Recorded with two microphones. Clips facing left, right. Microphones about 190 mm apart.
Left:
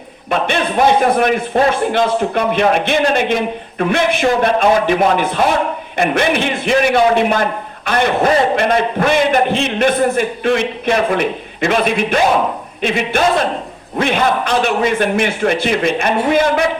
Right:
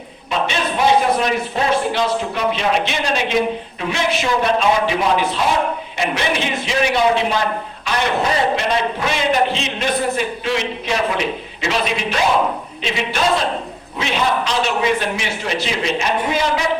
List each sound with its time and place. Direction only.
0.3 s a man's voice: 55° left (ahead or behind)